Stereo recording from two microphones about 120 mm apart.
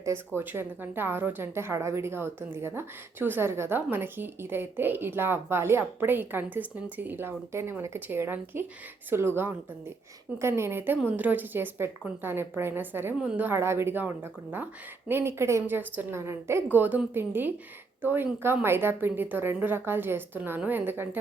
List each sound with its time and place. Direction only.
0.3 s speech: 20° right (ahead or behind)